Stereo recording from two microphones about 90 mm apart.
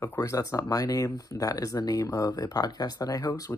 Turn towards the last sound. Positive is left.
turn(degrees=40)  # may be behind; listen again after turning